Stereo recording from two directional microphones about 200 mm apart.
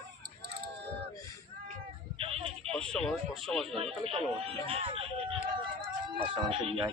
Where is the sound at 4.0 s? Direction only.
30° right (ahead or behind).